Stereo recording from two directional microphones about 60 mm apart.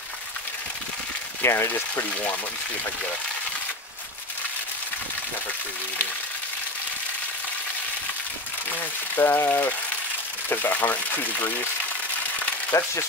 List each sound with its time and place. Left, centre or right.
1.4 s speech: left
9.1 s speech: left